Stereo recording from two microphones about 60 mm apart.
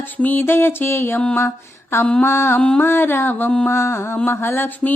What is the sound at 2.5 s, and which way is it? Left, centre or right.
Music, centre.